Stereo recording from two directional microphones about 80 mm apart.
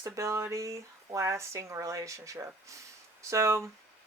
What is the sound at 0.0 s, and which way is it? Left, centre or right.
Speech, right.